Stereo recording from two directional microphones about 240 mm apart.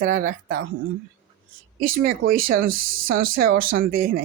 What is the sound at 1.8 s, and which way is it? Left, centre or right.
Speech, right.